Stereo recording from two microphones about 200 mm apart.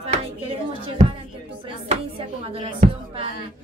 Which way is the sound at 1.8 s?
30° right (ahead or behind).